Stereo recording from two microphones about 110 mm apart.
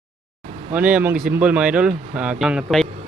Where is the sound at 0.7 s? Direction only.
15° right (ahead or behind).